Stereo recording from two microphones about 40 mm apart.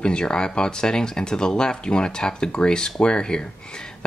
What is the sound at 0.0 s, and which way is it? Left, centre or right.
Speech, left.